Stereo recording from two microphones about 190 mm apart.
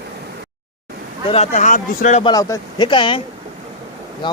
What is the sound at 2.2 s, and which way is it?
Speech, 20° left (ahead or behind).